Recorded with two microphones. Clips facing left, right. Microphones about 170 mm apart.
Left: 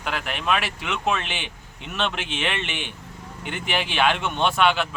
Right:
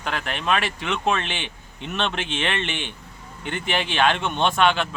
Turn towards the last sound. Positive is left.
turn(degrees=10)  # may be behind; listen again after turning